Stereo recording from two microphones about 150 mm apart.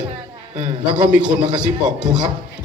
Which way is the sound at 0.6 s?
50° right (ahead or behind).